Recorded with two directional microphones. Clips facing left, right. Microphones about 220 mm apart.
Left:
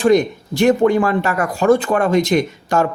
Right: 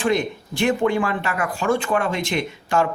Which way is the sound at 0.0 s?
40° left (ahead or behind).